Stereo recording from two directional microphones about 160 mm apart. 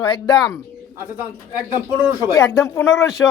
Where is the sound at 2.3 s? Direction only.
20° left (ahead or behind).